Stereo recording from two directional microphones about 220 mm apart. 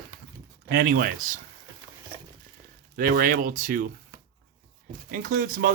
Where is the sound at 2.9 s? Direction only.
40° right (ahead or behind).